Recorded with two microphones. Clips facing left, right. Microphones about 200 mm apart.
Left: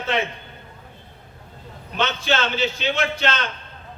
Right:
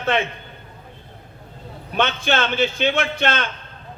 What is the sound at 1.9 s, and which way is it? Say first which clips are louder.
A man's voice: right 2 dB; 55° right (ahead or behind).